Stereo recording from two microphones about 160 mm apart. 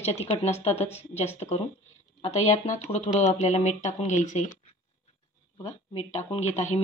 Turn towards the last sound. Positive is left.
turn(degrees=45)  # may be behind; listen again after turning